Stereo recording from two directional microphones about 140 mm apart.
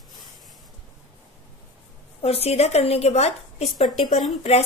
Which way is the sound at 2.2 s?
45° left (ahead or behind).